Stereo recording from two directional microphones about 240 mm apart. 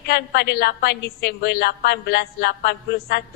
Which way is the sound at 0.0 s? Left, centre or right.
Left.